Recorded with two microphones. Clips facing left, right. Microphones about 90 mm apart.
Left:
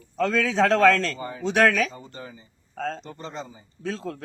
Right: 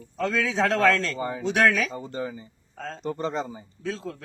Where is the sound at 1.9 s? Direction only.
35° right (ahead or behind).